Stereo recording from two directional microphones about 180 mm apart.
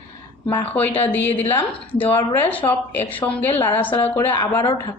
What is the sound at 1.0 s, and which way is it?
A woman's voice, 10° left (ahead or behind).